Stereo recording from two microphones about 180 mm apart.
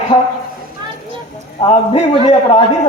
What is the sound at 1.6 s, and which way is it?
A man's voice, 35° left (ahead or behind).